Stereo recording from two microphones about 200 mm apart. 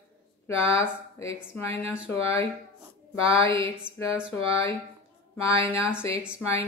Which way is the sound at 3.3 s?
15° left (ahead or behind).